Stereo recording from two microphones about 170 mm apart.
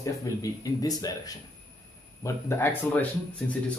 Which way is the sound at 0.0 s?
20° left (ahead or behind).